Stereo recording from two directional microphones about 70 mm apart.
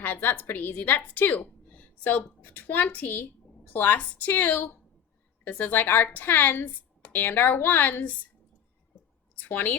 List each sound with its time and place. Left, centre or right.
0.0 s a woman's voice: left
9.4 s a woman's voice: left